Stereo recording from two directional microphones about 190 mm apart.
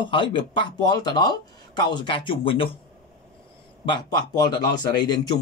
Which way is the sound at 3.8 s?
25° left (ahead or behind).